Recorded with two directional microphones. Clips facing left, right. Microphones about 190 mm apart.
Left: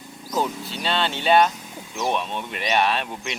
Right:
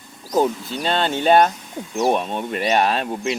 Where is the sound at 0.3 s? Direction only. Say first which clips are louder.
Right 6 dB; 45° right (ahead or behind).